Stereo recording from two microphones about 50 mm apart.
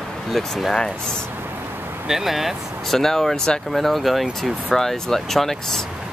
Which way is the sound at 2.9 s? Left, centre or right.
Centre.